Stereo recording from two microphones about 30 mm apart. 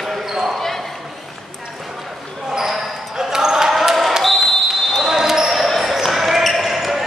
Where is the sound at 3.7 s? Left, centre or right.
Centre.